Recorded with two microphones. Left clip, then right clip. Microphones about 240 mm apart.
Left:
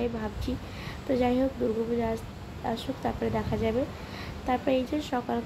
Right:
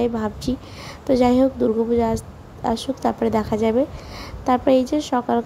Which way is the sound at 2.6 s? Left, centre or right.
Right.